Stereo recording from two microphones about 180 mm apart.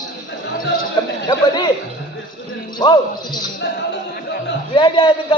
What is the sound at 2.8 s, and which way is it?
Speech, 25° left (ahead or behind).